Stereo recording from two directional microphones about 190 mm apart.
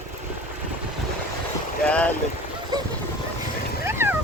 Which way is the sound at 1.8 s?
5° left (ahead or behind).